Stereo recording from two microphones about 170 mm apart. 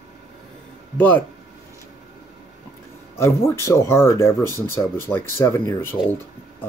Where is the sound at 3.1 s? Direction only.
15° left (ahead or behind).